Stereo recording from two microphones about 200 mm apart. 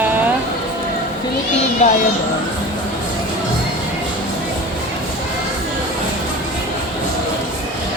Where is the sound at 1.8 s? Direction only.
35° left (ahead or behind).